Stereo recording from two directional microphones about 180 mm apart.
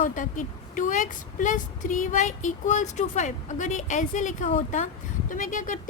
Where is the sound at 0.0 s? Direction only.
45° left (ahead or behind).